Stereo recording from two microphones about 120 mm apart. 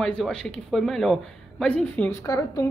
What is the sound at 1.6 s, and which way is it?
Speech, 10° left (ahead or behind).